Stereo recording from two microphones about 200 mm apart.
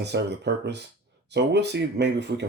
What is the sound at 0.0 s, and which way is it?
Speech, 60° right (ahead or behind).